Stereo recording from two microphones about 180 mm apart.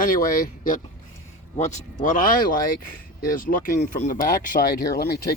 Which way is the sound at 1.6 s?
45° left (ahead or behind).